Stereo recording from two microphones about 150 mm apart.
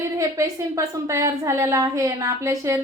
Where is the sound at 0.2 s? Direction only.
20° right (ahead or behind).